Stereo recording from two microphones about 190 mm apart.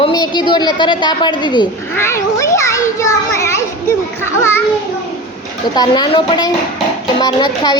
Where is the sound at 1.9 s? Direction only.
15° left (ahead or behind).